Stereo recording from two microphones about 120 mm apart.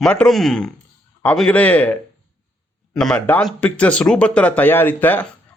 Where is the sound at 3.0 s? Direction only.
5° left (ahead or behind).